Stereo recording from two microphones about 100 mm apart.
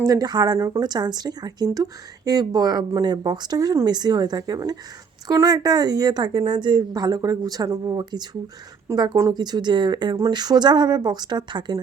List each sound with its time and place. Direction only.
0.0 s speech: 35° right (ahead or behind)
8.9 s speech: 30° right (ahead or behind)
9.3 s speech: 45° right (ahead or behind)